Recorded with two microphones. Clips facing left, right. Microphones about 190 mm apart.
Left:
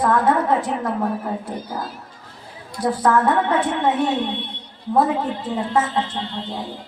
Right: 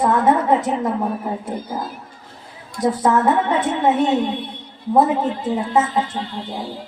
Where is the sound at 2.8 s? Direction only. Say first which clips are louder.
Right 1 dB; 25° right (ahead or behind).